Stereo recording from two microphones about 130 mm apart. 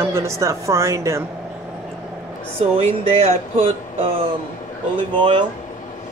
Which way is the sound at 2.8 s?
55° right (ahead or behind).